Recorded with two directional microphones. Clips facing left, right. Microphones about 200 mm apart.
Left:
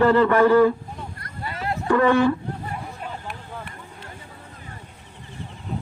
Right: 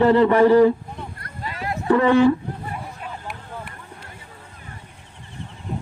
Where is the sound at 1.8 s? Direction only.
20° right (ahead or behind).